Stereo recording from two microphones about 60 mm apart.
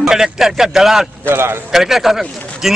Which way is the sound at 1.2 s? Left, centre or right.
Right.